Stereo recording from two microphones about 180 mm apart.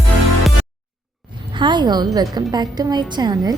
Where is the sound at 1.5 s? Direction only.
25° right (ahead or behind).